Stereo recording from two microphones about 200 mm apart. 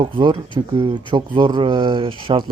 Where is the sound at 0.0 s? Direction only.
25° right (ahead or behind).